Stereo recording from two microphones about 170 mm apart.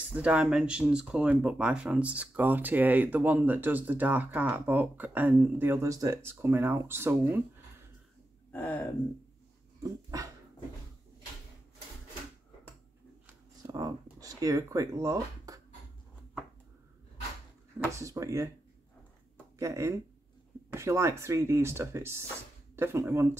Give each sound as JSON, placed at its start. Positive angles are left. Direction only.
{"t": 0.1, "sound": "speech", "side_deg": -5}
{"t": 8.5, "sound": "speech", "side_deg": 10}
{"t": 9.8, "sound": "dog", "side_deg": -20}
{"t": 13.6, "sound": "a sound", "side_deg": -20}
{"t": 14.2, "sound": "speech", "side_deg": -20}
{"t": 17.9, "sound": "speech", "side_deg": -20}
{"t": 19.3, "sound": "a sound", "side_deg": -15}
{"t": 20.7, "sound": "speech", "side_deg": -15}